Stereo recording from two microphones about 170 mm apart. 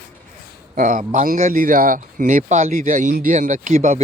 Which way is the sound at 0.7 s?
55° right (ahead or behind).